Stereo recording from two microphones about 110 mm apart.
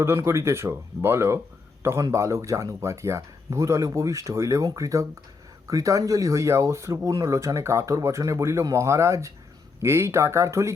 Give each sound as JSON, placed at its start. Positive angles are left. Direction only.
{"t": 0.0, "sound": "a man's voice", "side_deg": -25}